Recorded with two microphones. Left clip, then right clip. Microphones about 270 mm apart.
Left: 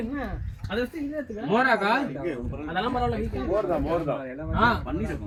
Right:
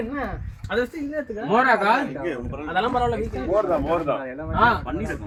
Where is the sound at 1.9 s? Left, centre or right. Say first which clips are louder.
Right 4 dB; right.